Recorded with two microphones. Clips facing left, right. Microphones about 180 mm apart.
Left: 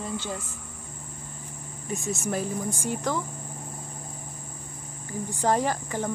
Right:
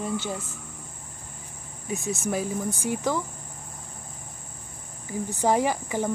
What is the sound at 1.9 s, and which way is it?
Speech, 20° right (ahead or behind).